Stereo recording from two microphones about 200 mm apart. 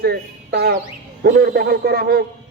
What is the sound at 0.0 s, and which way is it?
A man's voice, 55° right (ahead or behind).